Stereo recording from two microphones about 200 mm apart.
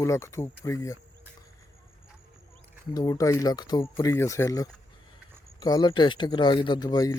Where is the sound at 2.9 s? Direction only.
20° left (ahead or behind).